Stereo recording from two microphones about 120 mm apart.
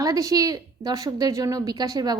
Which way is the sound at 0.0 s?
30° right (ahead or behind).